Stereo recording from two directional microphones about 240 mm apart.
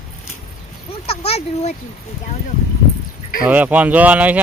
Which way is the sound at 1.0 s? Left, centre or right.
Left.